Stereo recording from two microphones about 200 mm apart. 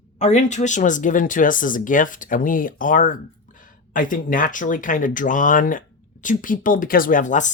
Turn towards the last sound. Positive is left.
turn(degrees=40)  # may be behind; listen again after turning